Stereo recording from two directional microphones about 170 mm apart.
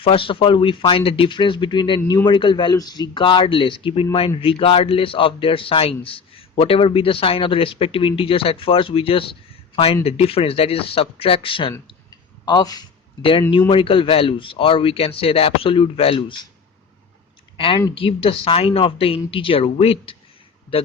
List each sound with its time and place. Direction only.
0.0 s a man's voice: 30° left (ahead or behind)
11.7 s a sound: 20° left (ahead or behind)
13.5 s a man's voice: 30° left (ahead or behind)
17.6 s a man's voice: 30° left (ahead or behind)